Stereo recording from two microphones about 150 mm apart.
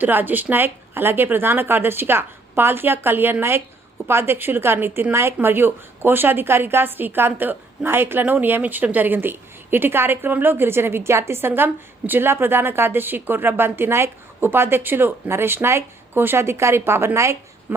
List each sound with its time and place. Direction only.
0.0 s a woman's voice: 10° right (ahead or behind)